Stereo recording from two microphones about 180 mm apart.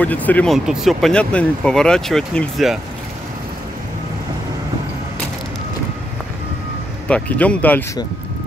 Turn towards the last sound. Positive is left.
turn(degrees=10)  # may be behind; listen again after turning